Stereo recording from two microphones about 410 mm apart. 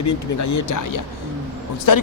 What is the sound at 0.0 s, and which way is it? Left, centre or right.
Speech, left.